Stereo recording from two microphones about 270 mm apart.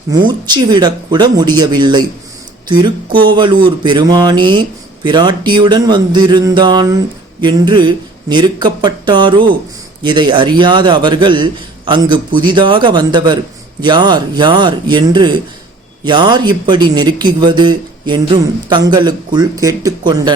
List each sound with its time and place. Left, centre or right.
0.1 s speech: centre